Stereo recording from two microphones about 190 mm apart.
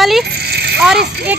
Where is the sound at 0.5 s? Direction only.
60° right (ahead or behind).